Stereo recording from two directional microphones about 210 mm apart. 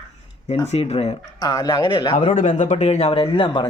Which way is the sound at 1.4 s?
20° left (ahead or behind).